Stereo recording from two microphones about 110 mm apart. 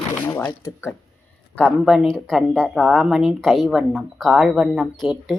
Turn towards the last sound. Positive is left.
turn(degrees=0)  # may be behind; listen again after turning